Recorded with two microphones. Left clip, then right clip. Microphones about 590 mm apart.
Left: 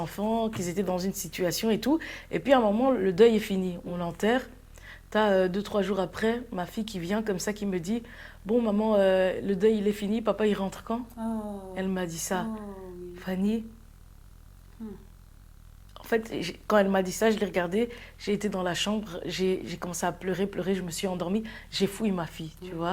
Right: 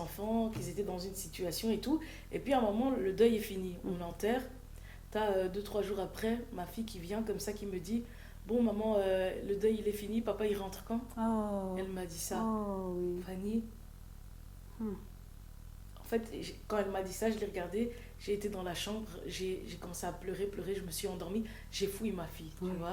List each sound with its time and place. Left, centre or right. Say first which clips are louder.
0.0 s a woman's voice: left 8 dB; left
11.2 s speech: even; right
11.7 s a woman's voice: left 8 dB; left
14.8 s speech: right 1 dB; right
16.0 s a woman's voice: left 9 dB; left